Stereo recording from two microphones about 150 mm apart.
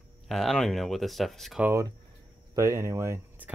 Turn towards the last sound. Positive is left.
turn(degrees=-15)  # may be behind; listen again after turning